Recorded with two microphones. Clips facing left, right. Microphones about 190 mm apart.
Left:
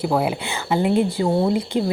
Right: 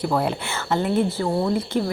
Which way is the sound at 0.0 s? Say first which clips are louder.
Left 2 dB; 10° left (ahead or behind).